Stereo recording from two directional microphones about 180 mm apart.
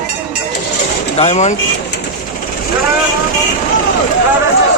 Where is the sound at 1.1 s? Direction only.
35° left (ahead or behind).